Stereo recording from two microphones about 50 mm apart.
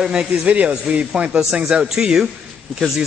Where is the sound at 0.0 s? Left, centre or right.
Centre.